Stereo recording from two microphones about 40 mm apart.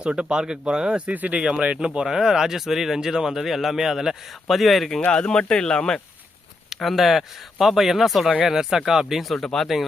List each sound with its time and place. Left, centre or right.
0.0 s speech: right
2.0 s speech: centre
5.1 s speech: left
6.8 s speech: centre
9.4 s speech: centre